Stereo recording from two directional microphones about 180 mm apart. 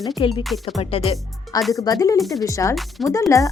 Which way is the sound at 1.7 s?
20° left (ahead or behind).